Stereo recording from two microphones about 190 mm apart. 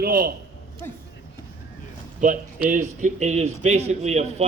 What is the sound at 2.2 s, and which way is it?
Speech, 45° right (ahead or behind).